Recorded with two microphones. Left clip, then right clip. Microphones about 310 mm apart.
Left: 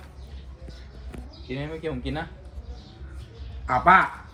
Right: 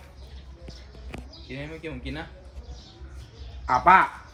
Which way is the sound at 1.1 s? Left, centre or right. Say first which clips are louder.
Right 3 dB; centre.